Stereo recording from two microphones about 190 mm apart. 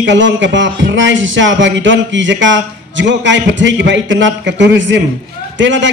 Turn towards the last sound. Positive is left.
turn(degrees=-75)  # may be behind; listen again after turning